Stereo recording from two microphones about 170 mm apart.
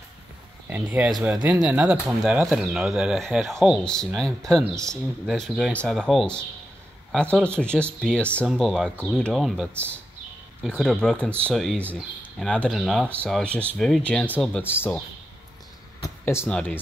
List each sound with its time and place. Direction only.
0.7 s a man's voice: 10° right (ahead or behind); by 15.0 s 10° left (ahead or behind)
16.0 s speech: 15° left (ahead or behind)